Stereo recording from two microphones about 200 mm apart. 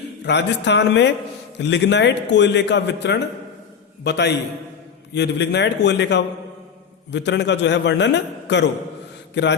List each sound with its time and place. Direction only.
0.3 s a man's voice: 60° left (ahead or behind)